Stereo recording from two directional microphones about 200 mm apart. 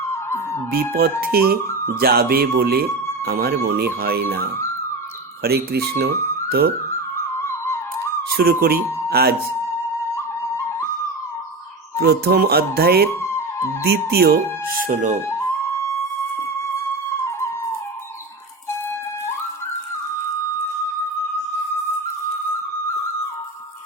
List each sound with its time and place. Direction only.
0.7 s speech: 50° right (ahead or behind)
7.3 s music: 15° left (ahead or behind)
8.3 s speech: 50° right (ahead or behind)
11.9 s speech: 50° right (ahead or behind)